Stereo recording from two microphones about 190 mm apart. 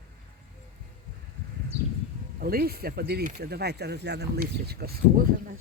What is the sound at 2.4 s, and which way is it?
Speech, 55° right (ahead or behind).